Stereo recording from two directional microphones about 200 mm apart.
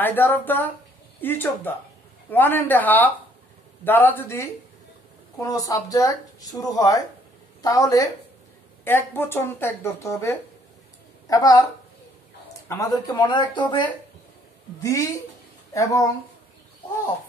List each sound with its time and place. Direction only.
0.0 s speech: 10° left (ahead or behind)
12.6 s speech: 20° left (ahead or behind)